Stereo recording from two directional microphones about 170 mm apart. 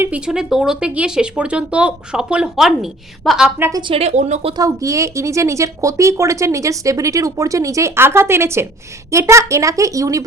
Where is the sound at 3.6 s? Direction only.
15° right (ahead or behind).